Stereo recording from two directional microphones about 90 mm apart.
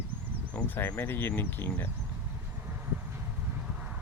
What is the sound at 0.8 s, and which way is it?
Speech, 25° left (ahead or behind).